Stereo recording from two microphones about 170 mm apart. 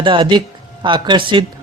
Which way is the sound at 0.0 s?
30° right (ahead or behind).